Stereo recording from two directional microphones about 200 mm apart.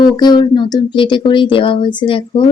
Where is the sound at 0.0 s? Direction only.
20° left (ahead or behind).